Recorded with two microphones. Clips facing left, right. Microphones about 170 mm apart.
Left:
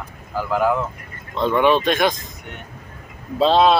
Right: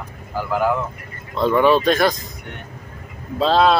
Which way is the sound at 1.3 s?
5° right (ahead or behind).